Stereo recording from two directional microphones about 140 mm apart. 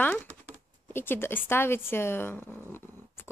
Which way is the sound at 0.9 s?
15° left (ahead or behind).